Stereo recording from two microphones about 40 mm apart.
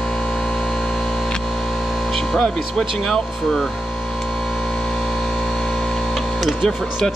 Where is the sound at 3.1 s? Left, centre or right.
Centre.